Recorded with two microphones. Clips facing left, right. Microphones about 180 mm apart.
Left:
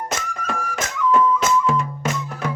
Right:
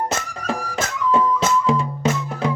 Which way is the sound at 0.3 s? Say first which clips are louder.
Right 2 dB; 35° right (ahead or behind).